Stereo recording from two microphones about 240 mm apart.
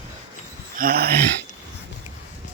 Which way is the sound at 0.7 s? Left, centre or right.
Right.